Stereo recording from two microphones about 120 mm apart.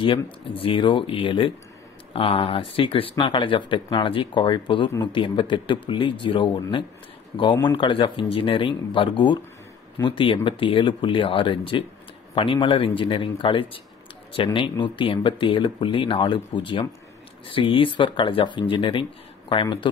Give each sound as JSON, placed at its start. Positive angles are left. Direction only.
{"t": 0.0, "sound": "speech", "side_deg": 45}